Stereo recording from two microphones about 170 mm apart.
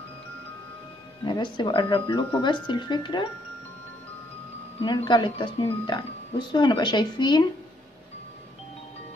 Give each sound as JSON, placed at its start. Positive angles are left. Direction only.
{"t": 1.2, "sound": "speech", "side_deg": 25}
{"t": 4.8, "sound": "speech", "side_deg": 25}